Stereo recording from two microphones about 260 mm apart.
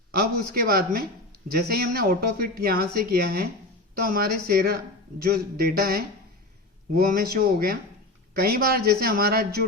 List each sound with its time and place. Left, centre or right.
0.1 s speech: right